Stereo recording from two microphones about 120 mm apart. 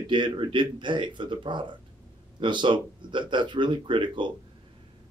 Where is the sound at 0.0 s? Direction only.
40° right (ahead or behind).